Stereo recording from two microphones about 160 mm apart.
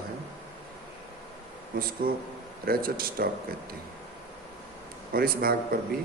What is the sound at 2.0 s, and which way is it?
A man's voice, 65° right (ahead or behind).